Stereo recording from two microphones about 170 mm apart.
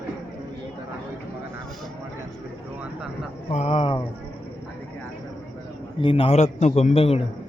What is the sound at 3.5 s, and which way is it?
Speech, 35° left (ahead or behind).